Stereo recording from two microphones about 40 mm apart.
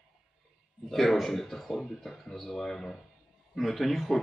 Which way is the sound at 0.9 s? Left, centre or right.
Centre.